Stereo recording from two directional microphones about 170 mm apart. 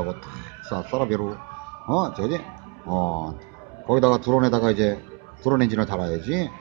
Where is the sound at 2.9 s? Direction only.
20° left (ahead or behind).